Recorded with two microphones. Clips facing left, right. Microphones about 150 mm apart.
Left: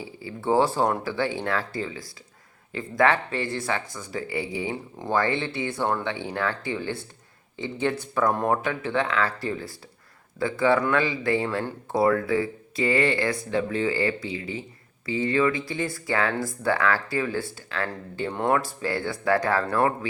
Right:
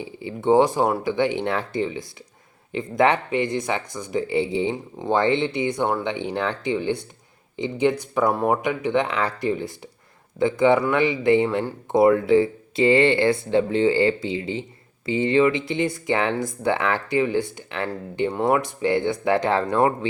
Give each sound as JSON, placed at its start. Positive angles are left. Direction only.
{"t": 0.0, "sound": "speech", "side_deg": -20}